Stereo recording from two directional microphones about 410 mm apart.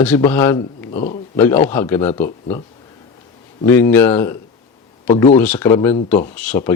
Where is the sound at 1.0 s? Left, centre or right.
Centre.